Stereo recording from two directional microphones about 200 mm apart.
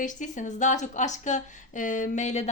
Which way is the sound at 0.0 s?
40° left (ahead or behind).